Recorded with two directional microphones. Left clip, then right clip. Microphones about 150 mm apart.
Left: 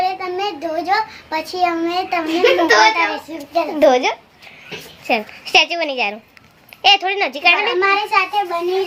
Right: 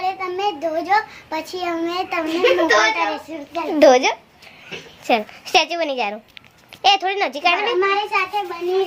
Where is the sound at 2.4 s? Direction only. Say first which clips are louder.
Left 3 dB; 20° left (ahead or behind).